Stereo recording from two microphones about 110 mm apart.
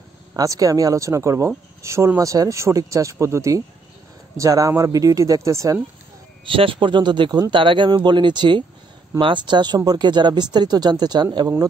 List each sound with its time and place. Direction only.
0.3 s speech: 30° right (ahead or behind)
6.4 s a man's voice: 50° right (ahead or behind)